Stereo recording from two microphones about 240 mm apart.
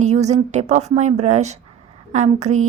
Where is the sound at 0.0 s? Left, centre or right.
Right.